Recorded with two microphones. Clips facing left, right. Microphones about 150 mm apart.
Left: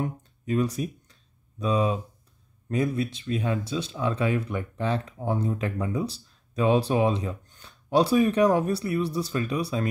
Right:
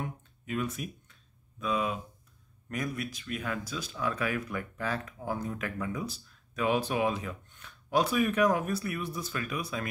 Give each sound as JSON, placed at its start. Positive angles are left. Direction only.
{"t": 0.0, "sound": "speech", "side_deg": 35}